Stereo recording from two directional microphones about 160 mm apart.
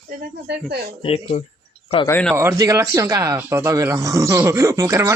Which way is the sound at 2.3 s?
20° right (ahead or behind).